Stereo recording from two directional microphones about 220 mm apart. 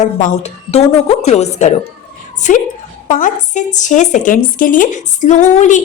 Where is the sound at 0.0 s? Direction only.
35° left (ahead or behind).